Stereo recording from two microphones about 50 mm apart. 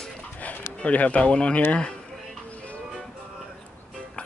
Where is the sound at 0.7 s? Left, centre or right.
Left.